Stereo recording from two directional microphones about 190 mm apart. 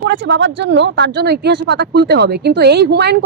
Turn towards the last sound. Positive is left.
turn(degrees=-60)  # may be behind; listen again after turning